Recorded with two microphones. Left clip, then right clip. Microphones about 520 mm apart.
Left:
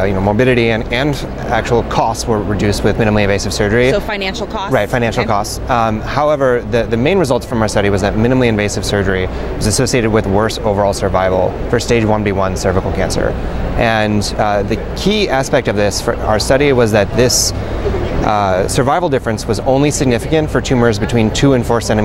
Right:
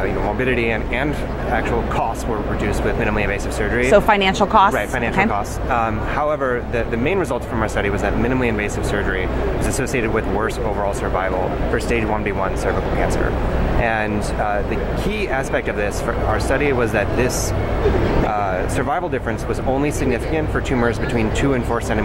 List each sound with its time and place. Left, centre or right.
0.0 s speech: left
2.6 s speech: left
3.9 s speech: right
4.7 s speech: left
13.7 s speech: left